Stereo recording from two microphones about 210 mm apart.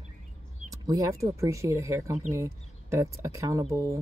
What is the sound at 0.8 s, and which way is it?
Speech, 15° right (ahead or behind).